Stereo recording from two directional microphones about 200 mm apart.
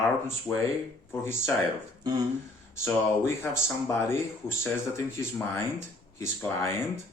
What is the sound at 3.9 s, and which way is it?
Speech, 10° left (ahead or behind).